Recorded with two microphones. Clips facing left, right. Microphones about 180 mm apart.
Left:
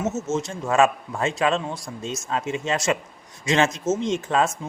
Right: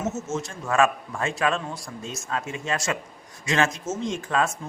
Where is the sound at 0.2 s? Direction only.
20° left (ahead or behind).